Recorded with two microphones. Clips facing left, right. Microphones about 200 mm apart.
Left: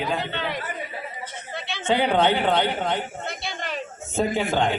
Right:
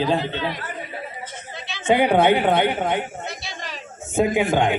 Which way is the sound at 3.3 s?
55° left (ahead or behind).